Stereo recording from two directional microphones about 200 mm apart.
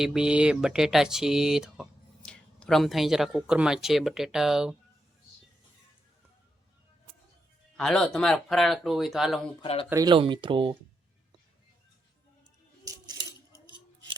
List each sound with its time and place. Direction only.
0.0 s speech: 5° right (ahead or behind)
7.8 s speech: centre (ahead or behind)
9.6 s speech: 25° left (ahead or behind)
9.9 s speech: 20° right (ahead or behind)
12.8 s coin: 20° right (ahead or behind)